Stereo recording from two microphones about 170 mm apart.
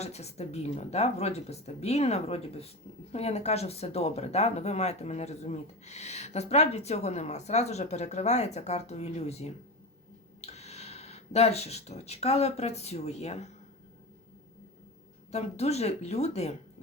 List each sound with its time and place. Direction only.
0.0 s speech: 40° left (ahead or behind)
15.3 s speech: 40° left (ahead or behind)